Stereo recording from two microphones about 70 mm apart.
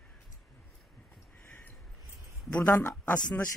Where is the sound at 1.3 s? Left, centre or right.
Left.